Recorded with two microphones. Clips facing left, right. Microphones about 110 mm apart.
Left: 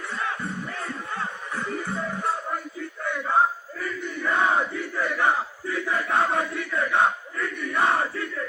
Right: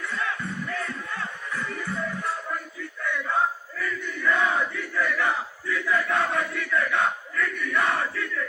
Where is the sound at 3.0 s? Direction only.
35° left (ahead or behind).